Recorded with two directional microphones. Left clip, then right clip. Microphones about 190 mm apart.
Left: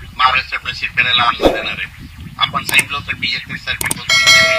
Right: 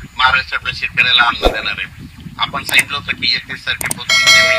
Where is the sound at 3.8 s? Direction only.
Centre (ahead or behind).